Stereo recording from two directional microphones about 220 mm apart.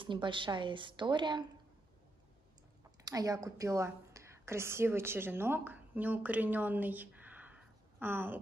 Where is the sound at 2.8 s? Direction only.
15° right (ahead or behind).